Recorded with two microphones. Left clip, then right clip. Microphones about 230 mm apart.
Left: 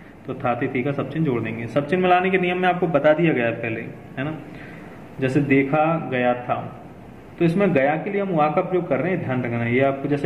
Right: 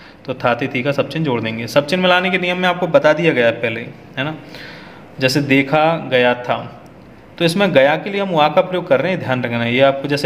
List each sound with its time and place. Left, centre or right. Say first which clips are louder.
0.3 s a man's voice: right 6 dB; right